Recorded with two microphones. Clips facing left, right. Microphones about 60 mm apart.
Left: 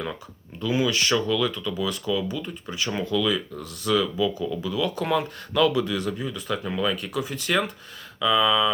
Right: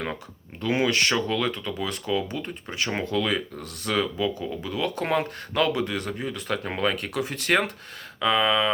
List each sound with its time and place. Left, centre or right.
0.6 s speech: right